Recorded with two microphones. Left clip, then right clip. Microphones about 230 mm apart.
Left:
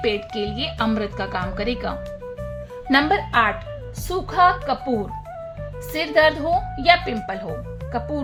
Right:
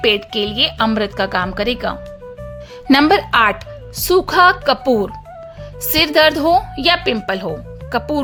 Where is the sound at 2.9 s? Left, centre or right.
Right.